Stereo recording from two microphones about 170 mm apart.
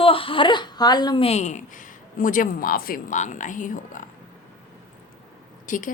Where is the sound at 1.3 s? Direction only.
45° left (ahead or behind).